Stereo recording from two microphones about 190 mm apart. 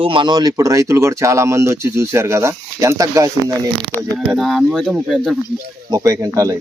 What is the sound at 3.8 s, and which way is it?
Speech, centre (ahead or behind).